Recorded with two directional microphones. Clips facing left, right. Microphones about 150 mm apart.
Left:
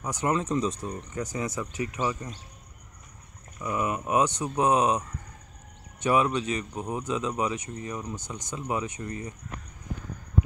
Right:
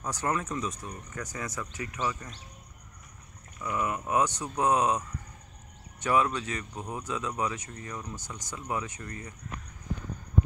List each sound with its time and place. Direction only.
0.0 s speech: 15° left (ahead or behind)
3.5 s speech: 15° left (ahead or behind)
6.0 s speech: 20° left (ahead or behind)